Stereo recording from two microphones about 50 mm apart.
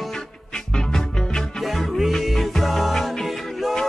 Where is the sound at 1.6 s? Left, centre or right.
Centre.